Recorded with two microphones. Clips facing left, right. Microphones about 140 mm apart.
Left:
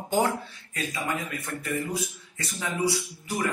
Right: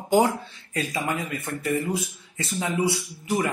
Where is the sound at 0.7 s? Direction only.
35° right (ahead or behind).